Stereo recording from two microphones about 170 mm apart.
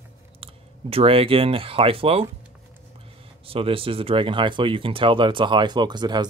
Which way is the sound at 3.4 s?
35° right (ahead or behind).